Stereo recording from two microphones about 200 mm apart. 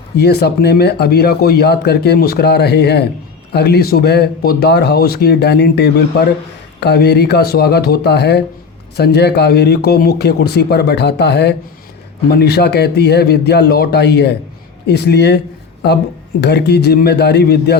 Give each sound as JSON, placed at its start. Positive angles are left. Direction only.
{"t": 0.2, "sound": "a man's voice", "side_deg": 55}
{"t": 16.4, "sound": "a man's voice", "side_deg": 55}